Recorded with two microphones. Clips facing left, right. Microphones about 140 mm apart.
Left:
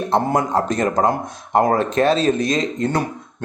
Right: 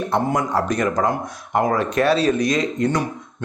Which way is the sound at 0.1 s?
25° left (ahead or behind).